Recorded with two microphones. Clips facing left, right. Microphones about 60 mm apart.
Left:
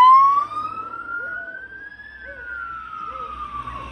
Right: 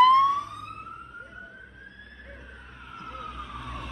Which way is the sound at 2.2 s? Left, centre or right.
Left.